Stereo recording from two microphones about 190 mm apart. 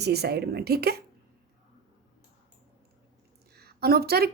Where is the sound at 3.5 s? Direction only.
55° right (ahead or behind).